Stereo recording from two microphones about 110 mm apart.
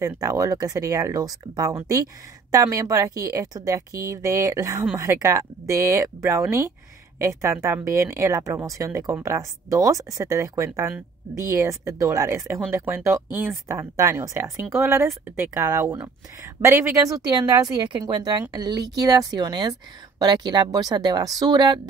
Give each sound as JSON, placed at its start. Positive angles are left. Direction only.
{"t": 0.0, "sound": "speech", "side_deg": -30}
{"t": 17.5, "sound": "speech", "side_deg": -35}